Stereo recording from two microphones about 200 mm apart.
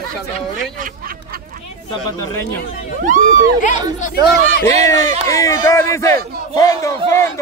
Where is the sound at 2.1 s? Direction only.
15° left (ahead or behind).